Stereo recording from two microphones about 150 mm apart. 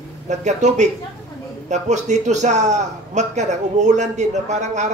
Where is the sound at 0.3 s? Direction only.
50° right (ahead or behind).